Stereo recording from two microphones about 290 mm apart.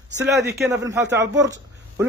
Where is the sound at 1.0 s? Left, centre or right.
Right.